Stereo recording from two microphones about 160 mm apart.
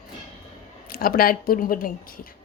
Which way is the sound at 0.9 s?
65° left (ahead or behind).